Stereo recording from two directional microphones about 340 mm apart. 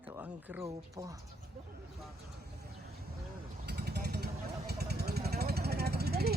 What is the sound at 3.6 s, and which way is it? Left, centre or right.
Vehicle, right.